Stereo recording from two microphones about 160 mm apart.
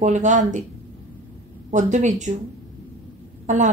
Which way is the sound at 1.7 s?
50° right (ahead or behind).